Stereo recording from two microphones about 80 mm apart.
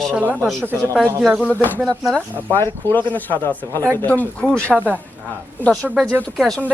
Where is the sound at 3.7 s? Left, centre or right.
Right.